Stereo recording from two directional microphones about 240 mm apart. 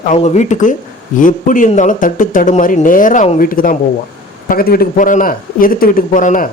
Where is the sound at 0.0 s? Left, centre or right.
Left.